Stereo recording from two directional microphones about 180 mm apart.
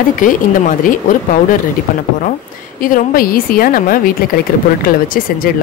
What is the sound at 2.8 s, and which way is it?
Speech, 50° left (ahead or behind).